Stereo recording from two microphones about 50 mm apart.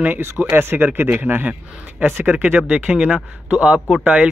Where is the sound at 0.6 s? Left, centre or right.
Right.